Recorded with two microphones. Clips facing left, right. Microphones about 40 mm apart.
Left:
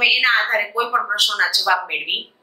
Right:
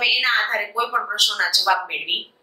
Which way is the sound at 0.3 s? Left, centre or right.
Centre.